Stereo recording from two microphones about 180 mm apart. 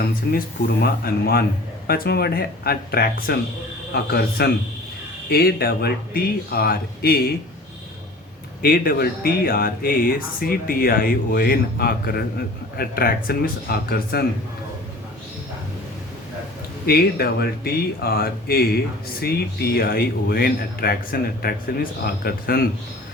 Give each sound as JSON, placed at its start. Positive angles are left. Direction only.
{"t": 0.0, "sound": "speech", "side_deg": 60}
{"t": 8.6, "sound": "speech", "side_deg": 55}
{"t": 16.8, "sound": "speech", "side_deg": 60}